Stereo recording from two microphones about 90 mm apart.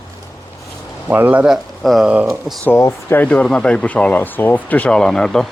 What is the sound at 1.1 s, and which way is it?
Speech, 20° right (ahead or behind).